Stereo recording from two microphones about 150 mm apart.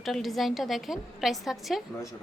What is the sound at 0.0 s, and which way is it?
A woman's voice, centre (ahead or behind).